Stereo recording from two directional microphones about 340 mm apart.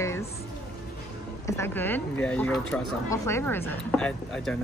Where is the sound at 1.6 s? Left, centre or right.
Centre.